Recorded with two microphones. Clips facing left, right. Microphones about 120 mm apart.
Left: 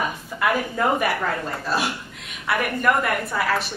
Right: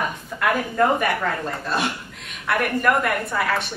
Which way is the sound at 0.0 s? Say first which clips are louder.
Even; centre (ahead or behind).